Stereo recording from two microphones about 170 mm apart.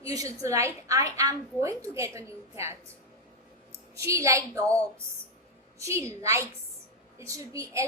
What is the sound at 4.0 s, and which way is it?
Speech, 15° right (ahead or behind).